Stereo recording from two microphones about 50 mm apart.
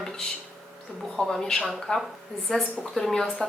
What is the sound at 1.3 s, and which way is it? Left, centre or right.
A woman's voice, centre.